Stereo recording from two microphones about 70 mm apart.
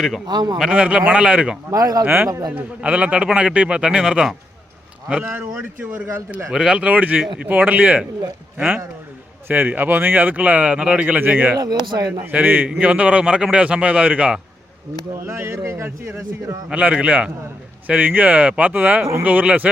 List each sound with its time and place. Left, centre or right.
0.3 s a man's voice: right
0.7 s a man's voice: centre
1.7 s speech: right
2.0 s a man's voice: right
2.5 s a man's voice: centre
5.2 s speech: right
6.5 s a man's voice: centre
11.9 s a man's voice: right
12.2 s a man's voice: right
15.3 s a man's voice: right
16.6 s speech: centre